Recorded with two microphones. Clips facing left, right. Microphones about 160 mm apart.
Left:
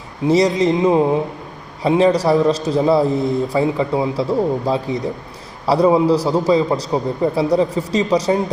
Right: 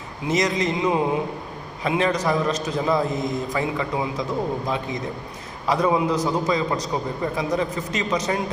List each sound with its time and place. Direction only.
0.3 s a man's voice: 30° left (ahead or behind)